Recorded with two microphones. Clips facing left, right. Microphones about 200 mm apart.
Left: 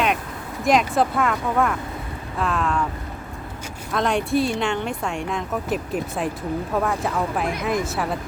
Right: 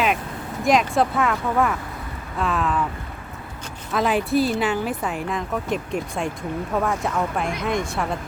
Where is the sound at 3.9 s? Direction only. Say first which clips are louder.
Right 1 dB; 5° right (ahead or behind).